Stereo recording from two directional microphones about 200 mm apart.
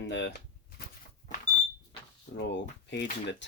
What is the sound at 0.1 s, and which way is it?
Speech, 60° left (ahead or behind).